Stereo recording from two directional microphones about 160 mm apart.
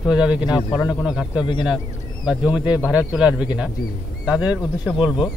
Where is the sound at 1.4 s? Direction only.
30° left (ahead or behind).